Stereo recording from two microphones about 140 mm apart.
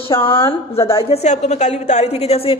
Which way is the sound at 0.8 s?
20° left (ahead or behind).